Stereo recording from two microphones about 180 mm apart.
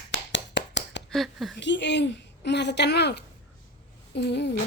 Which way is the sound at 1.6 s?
80° left.